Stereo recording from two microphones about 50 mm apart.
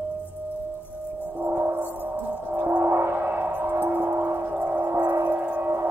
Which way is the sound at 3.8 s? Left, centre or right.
Right.